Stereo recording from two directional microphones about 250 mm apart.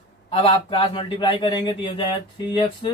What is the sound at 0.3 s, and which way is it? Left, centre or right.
Speech, left.